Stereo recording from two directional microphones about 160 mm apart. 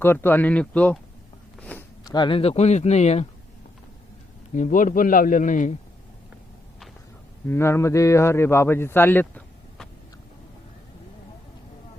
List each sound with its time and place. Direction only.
0.0 s speech: 15° left (ahead or behind)
1.5 s a sound: 10° left (ahead or behind)
2.0 s speech: 30° left (ahead or behind); by 3.2 s 45° left (ahead or behind)
4.5 s a man's voice: 55° left (ahead or behind)
7.4 s a man's voice: 15° left (ahead or behind)